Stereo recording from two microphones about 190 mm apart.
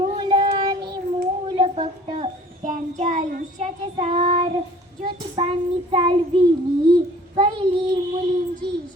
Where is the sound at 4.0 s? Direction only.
30° right (ahead or behind).